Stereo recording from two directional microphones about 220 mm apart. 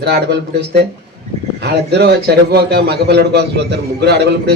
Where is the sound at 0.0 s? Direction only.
50° right (ahead or behind).